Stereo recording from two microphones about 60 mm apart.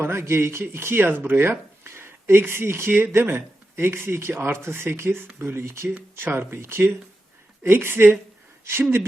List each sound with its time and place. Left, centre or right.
0.0 s speech: right
6.2 s speech: right
6.5 s a woman's voice: right